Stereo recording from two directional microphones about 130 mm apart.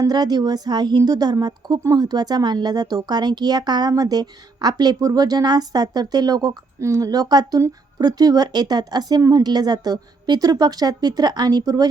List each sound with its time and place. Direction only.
0.0 s a woman's voice: 30° right (ahead or behind)